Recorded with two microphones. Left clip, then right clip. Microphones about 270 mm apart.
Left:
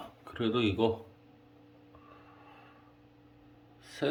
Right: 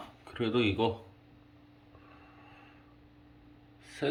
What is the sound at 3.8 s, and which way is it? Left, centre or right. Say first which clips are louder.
Gasp: left 1 dB; centre.